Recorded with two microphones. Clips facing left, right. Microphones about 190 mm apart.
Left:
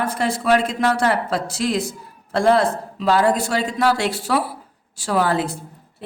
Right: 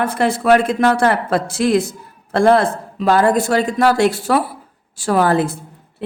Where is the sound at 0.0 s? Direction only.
60° right (ahead or behind).